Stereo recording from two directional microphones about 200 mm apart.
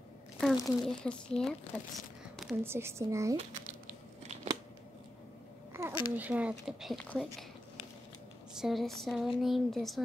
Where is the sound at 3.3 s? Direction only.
35° right (ahead or behind).